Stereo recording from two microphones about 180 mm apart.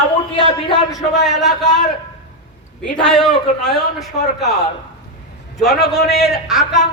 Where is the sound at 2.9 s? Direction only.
5° left (ahead or behind).